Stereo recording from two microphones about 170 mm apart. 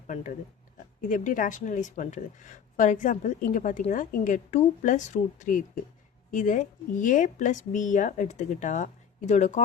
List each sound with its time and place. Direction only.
0.1 s a woman's voice: 45° left (ahead or behind)